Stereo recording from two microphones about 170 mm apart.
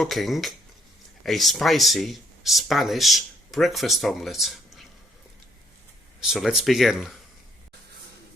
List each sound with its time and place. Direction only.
0.0 s speech: centre (ahead or behind)
6.1 s speech: centre (ahead or behind)